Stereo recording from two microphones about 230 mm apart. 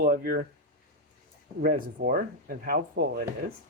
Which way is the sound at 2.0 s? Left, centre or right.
Right.